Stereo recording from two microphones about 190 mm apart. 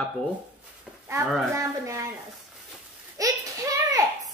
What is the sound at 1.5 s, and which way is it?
Speech, 15° right (ahead or behind).